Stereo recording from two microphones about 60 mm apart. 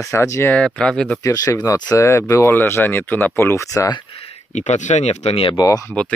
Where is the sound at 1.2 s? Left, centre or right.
Left.